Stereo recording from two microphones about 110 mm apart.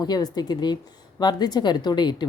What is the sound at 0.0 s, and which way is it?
A woman's voice, 40° left (ahead or behind).